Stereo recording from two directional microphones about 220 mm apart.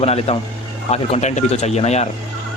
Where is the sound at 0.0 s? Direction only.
30° left (ahead or behind).